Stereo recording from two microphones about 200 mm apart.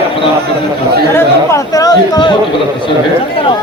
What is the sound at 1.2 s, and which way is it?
Speech, 15° left (ahead or behind).